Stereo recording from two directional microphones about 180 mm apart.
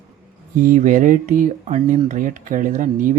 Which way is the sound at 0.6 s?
50° right (ahead or behind).